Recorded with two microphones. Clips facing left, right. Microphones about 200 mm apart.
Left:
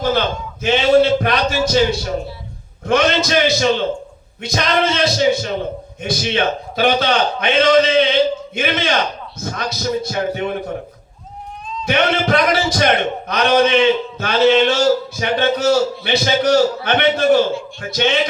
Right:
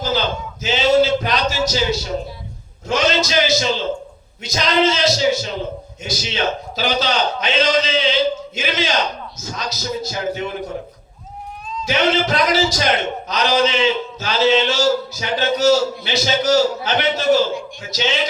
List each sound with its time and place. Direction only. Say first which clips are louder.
0.0 s a sound: left 3 dB; 55° left (ahead or behind)
2.8 s a man's voice: left 3 dB; 55° left (ahead or behind)
11.9 s a man's voice: left 2 dB; 55° left (ahead or behind)